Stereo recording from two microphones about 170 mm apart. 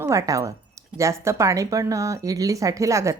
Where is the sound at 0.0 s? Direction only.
20° right (ahead or behind).